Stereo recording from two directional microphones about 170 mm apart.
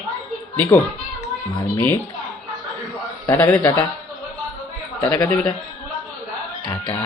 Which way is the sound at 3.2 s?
10° left (ahead or behind).